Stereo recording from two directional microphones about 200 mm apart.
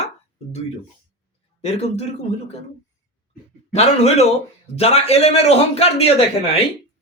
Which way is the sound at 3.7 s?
30° left (ahead or behind).